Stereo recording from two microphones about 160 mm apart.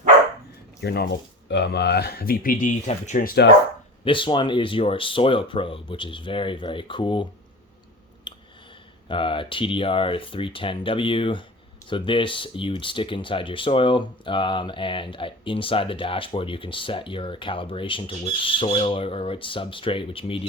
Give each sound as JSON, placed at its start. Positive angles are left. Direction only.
{"t": 0.8, "sound": "speech", "side_deg": 90}
{"t": 4.0, "sound": "speech", "side_deg": 30}
{"t": 8.3, "sound": "a sound", "side_deg": 30}
{"t": 9.0, "sound": "speech", "side_deg": 30}